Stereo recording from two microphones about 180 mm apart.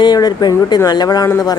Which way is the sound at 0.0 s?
20° left (ahead or behind).